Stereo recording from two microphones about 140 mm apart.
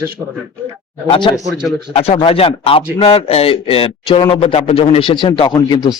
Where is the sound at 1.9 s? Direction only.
45° left (ahead or behind).